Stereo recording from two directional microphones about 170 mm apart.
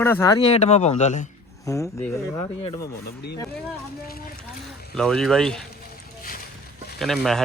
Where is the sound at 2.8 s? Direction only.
70° left (ahead or behind).